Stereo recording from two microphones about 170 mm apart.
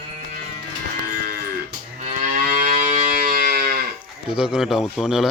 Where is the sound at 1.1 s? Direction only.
65° right (ahead or behind).